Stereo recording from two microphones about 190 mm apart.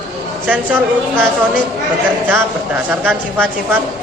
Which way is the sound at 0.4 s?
10° right (ahead or behind).